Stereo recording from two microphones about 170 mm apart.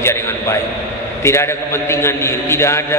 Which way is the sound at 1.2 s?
15° left (ahead or behind).